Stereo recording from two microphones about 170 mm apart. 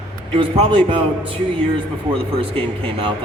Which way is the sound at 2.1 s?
30° right (ahead or behind).